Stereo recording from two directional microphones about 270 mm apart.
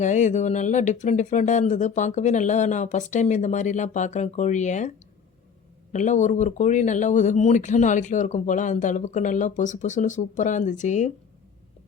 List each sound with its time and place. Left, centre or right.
0.0 s speech: left
5.9 s speech: left